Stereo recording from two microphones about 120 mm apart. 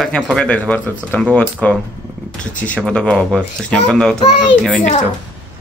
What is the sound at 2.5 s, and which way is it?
Speech, 10° left (ahead or behind).